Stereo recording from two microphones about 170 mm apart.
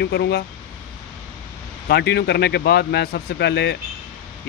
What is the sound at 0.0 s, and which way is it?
Speech, 75° left (ahead or behind).